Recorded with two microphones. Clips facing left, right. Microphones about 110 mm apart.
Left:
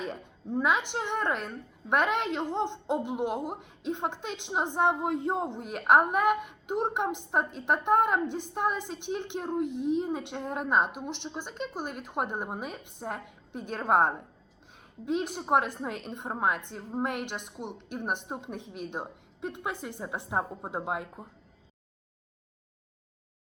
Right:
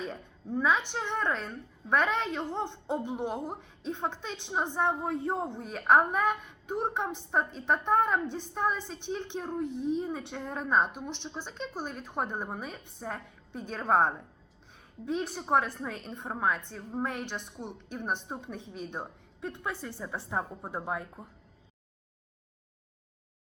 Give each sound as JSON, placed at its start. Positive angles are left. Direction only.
{"t": 0.0, "sound": "a woman's voice", "side_deg": 15}